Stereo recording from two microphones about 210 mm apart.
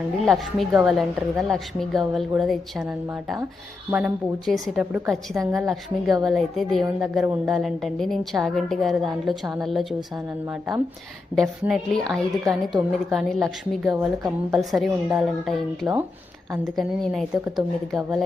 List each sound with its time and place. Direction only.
0.3 s a woman's voice: centre (ahead or behind)